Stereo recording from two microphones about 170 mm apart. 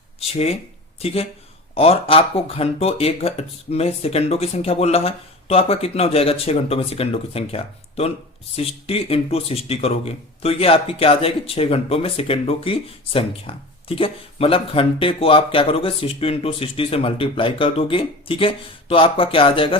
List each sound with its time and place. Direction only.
0.2 s speech: 35° left (ahead or behind)